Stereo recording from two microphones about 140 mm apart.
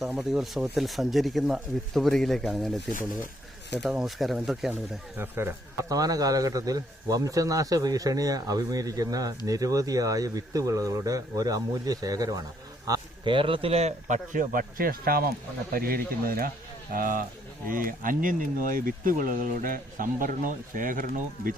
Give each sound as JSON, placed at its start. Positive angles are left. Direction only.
{"t": 0.0, "sound": "speech", "side_deg": -5}
{"t": 3.8, "sound": "speech", "side_deg": 0}
{"t": 5.1, "sound": "a man's voice", "side_deg": -15}